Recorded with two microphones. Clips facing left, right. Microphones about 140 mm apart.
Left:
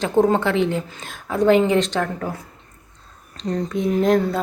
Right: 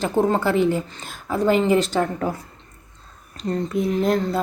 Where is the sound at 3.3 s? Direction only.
5° right (ahead or behind).